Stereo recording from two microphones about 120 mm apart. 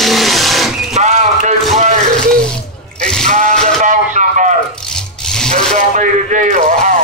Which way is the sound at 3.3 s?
75° right (ahead or behind).